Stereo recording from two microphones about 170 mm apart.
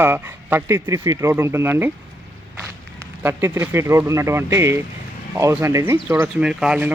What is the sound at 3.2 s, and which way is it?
Speech, 15° right (ahead or behind).